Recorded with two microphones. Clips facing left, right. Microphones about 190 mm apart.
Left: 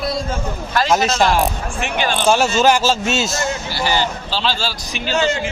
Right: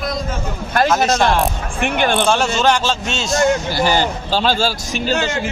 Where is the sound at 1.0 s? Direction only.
55° right (ahead or behind).